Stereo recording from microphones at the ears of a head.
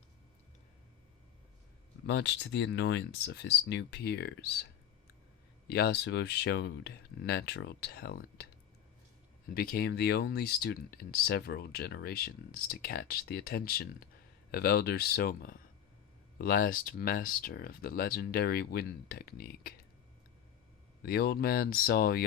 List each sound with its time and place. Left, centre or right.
1.9 s speech: left
9.5 s speech: left
21.0 s speech: left